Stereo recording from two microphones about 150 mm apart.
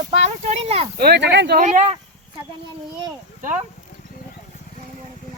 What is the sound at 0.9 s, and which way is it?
Speech, 90° right.